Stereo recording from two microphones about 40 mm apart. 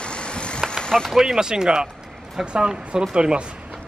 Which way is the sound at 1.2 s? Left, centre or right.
Centre.